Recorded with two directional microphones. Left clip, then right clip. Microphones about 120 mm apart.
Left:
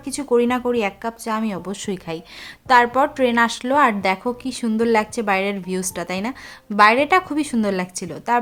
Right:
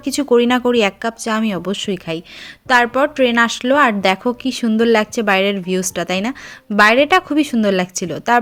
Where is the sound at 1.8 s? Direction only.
15° right (ahead or behind); by 8.4 s 30° right (ahead or behind).